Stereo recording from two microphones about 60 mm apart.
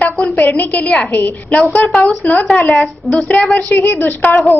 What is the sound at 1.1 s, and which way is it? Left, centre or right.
A woman's voice, left.